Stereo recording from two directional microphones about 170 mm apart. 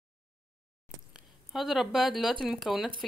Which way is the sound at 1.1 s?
Centre (ahead or behind).